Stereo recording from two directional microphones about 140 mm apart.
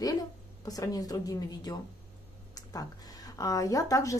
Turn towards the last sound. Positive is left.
turn(degrees=25)  # may be behind; listen again after turning